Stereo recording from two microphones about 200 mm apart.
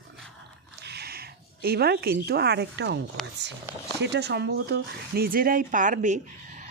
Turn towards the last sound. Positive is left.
turn(degrees=-40)  # may be behind; listen again after turning